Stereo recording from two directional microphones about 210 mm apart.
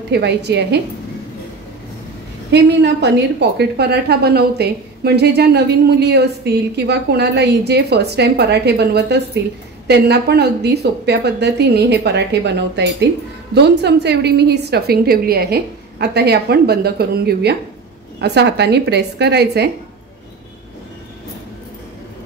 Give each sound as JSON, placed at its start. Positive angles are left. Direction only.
{"t": 0.1, "sound": "a woman's voice", "side_deg": -55}
{"t": 2.5, "sound": "a woman's voice", "side_deg": -55}